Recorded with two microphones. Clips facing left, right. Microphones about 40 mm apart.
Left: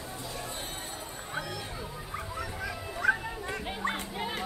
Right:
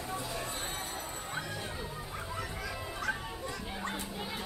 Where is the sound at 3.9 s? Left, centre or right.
Left.